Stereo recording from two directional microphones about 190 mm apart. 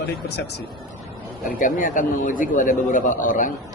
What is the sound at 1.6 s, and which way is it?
A man's voice, 45° left (ahead or behind).